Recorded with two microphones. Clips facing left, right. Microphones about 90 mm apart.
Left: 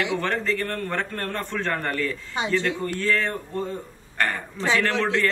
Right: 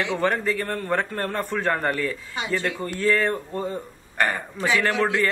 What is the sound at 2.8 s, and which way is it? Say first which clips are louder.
A man's voice: right 2 dB; 5° right (ahead or behind).